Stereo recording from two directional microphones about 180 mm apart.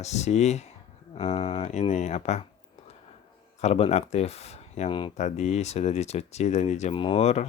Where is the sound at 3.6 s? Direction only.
35° left (ahead or behind).